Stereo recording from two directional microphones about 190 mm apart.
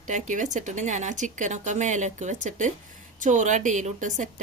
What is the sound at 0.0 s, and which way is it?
A woman's voice, 40° right (ahead or behind).